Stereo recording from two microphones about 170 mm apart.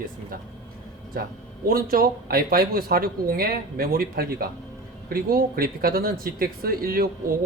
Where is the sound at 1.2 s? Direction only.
60° right (ahead or behind).